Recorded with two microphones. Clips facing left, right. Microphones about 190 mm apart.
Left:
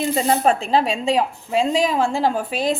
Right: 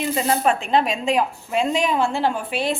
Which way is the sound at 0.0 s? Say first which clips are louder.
Left 2 dB; 30° left (ahead or behind).